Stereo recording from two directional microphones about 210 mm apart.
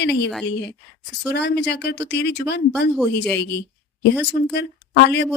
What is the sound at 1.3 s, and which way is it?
Speech, 55° left (ahead or behind).